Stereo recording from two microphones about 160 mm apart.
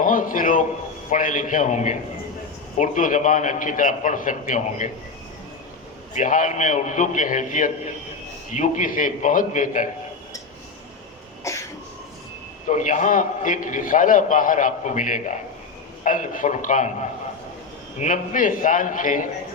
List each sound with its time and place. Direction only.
0.0 s a sound: 55° left (ahead or behind)
1.1 s a man's voice: 55° left (ahead or behind)
6.1 s a man's voice: 55° left (ahead or behind)
11.5 s cough: 20° left (ahead or behind)
12.6 s a man's voice: 50° left (ahead or behind)
18.0 s a man's voice: 50° left (ahead or behind)